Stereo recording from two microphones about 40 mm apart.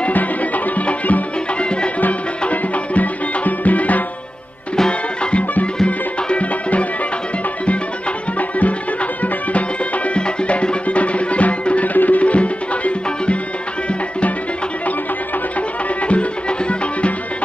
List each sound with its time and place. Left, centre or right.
0.1 s music: left
1.6 s music: left
2.5 s music: left
4.7 s music: centre
6.2 s music: left
8.4 s music: left
16.1 s music: left